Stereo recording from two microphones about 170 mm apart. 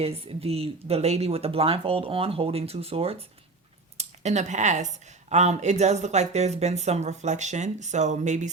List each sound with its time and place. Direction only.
0.0 s speech: 35° right (ahead or behind)